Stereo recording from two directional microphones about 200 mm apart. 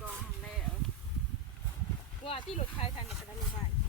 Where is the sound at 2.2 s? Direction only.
25° left (ahead or behind).